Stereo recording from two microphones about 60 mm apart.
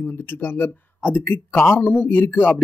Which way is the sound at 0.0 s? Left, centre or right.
Left.